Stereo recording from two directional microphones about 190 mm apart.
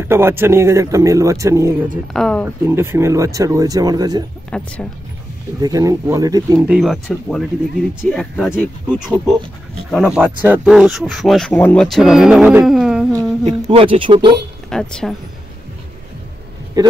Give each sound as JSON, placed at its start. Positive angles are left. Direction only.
{"t": 0.1, "sound": "speech", "side_deg": -10}
{"t": 2.1, "sound": "speech", "side_deg": 5}
{"t": 2.4, "sound": "speech", "side_deg": -10}
{"t": 4.5, "sound": "speech", "side_deg": 5}
{"t": 5.6, "sound": "speech", "side_deg": -20}
{"t": 6.7, "sound": "speech", "side_deg": 0}
{"t": 13.1, "sound": "speech", "side_deg": -20}
{"t": 14.7, "sound": "speech", "side_deg": 5}
{"t": 16.8, "sound": "a man's voice", "side_deg": -20}